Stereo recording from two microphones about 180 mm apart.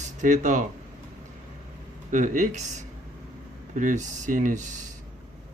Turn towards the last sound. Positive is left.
turn(degrees=-45)  # may be behind; listen again after turning